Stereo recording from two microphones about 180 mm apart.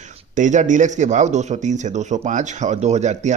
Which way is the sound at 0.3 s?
45° right (ahead or behind).